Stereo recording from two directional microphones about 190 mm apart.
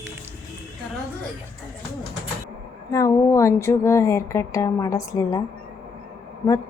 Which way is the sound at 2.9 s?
15° left (ahead or behind).